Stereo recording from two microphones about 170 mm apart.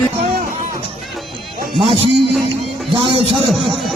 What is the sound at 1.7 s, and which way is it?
A man's voice, 30° right (ahead or behind).